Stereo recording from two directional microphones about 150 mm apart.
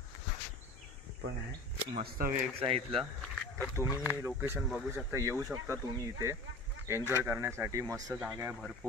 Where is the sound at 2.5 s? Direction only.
40° right (ahead or behind).